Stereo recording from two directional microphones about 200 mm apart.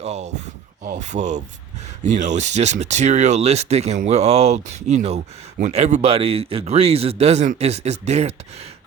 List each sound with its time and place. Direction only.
0.0 s speech: 35° right (ahead or behind)